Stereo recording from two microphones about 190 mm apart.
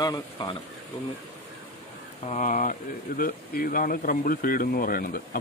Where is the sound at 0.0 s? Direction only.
20° left (ahead or behind).